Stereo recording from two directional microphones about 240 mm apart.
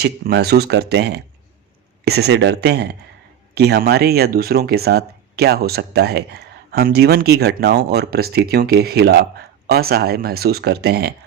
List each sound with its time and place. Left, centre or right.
0.0 s speech: right